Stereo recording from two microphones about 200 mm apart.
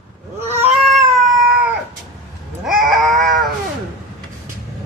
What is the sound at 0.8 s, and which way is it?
Cat, centre (ahead or behind).